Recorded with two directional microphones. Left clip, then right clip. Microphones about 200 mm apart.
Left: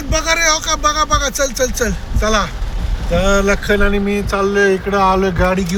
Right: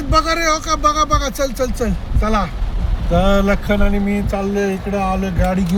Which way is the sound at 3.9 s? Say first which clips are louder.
Left 4 dB; 40° left (ahead or behind).